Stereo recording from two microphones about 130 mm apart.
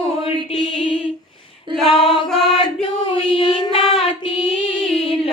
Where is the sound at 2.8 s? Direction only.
40° left (ahead or behind).